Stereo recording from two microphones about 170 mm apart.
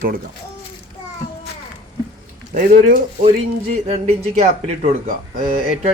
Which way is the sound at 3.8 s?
40° right (ahead or behind).